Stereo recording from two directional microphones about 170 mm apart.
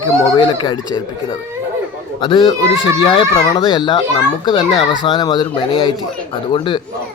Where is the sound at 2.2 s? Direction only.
30° left (ahead or behind).